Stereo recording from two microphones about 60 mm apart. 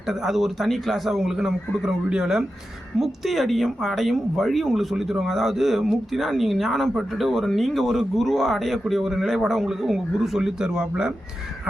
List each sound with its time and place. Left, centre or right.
0.1 s speech: centre
1.4 s a man's voice: centre
3.0 s speech: centre